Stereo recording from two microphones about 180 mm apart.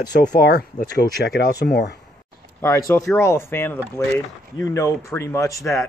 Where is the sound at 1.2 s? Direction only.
65° left (ahead or behind).